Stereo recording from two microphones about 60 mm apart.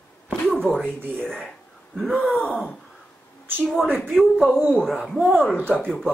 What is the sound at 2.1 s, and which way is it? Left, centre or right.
Speech, centre.